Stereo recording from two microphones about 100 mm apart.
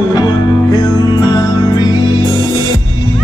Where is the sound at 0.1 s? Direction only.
45° left (ahead or behind).